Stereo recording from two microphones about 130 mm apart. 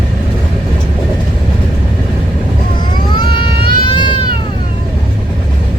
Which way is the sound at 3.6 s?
35° left (ahead or behind).